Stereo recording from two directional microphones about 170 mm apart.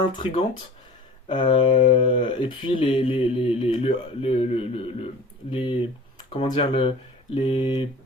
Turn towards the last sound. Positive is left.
turn(degrees=30)  # may be behind; listen again after turning